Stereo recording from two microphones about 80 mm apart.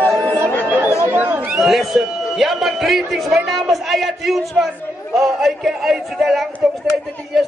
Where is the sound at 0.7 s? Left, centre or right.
Right.